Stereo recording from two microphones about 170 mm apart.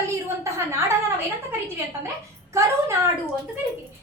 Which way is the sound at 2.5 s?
15° right (ahead or behind).